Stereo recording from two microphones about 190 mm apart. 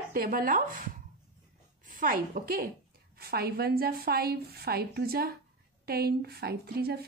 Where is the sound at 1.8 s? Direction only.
45° right (ahead or behind).